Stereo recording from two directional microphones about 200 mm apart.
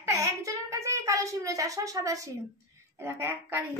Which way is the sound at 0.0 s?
15° right (ahead or behind).